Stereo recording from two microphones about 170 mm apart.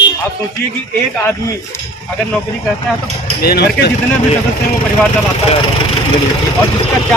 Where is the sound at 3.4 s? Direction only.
65° left (ahead or behind).